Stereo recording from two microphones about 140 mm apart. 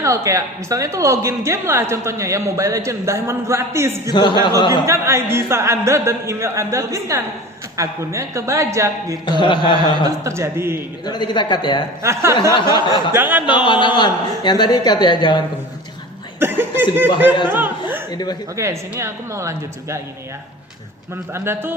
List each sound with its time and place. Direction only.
0.0 s speech: 20° right (ahead or behind)
4.1 s a man's voice: 35° left (ahead or behind)
4.7 s speech: 20° right (ahead or behind)
9.4 s a man's voice: 35° left (ahead or behind)
10.0 s speech: 20° right (ahead or behind)
11.0 s a man's voice: 30° left (ahead or behind)
12.0 s speech: 20° right (ahead or behind)
13.5 s a man's voice: 35° left (ahead or behind)
16.4 s speech: 15° right (ahead or behind)
17.5 s chuckle: 15° right (ahead or behind)
18.1 s a woman's voice: 30° left (ahead or behind)
18.5 s speech: 20° right (ahead or behind)
21.3 s speech: 15° right (ahead or behind)